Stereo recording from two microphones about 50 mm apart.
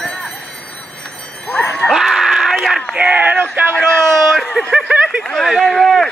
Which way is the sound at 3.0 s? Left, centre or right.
Right.